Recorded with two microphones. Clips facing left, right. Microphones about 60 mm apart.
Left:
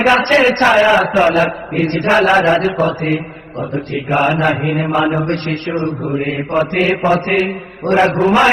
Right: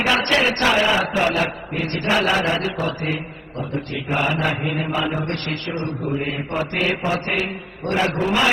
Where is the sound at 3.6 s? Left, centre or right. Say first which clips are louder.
Left 6 dB; left.